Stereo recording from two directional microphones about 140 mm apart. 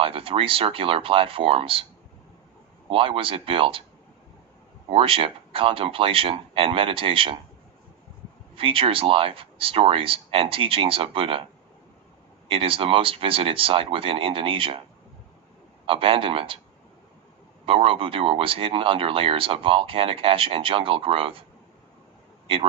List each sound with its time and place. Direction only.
0.0 s speech: 40° right (ahead or behind)
2.9 s speech: 40° right (ahead or behind)
4.9 s speech: 40° right (ahead or behind)
8.5 s speech: 40° right (ahead or behind)
12.4 s speech: 40° right (ahead or behind)
15.8 s speech: 40° right (ahead or behind)
17.6 s speech: 40° right (ahead or behind)